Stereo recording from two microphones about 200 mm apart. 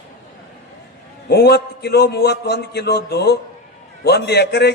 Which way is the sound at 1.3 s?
55° left (ahead or behind).